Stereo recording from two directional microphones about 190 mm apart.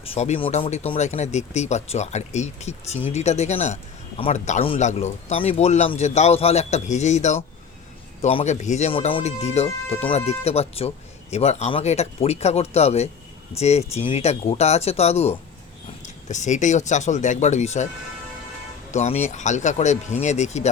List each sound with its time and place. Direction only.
0.0 s a man's voice: 30° left (ahead or behind)
18.9 s a man's voice: 35° left (ahead or behind)